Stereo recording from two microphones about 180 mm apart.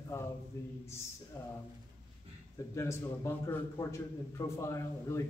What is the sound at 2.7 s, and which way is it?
A man's voice, 15° left (ahead or behind).